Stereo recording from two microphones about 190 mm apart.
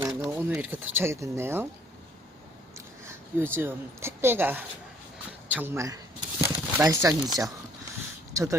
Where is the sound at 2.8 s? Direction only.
15° right (ahead or behind).